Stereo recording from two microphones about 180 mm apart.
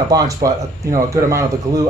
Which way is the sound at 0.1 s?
20° right (ahead or behind).